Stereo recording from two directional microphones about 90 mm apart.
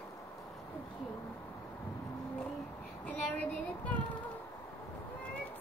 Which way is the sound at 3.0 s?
15° left (ahead or behind).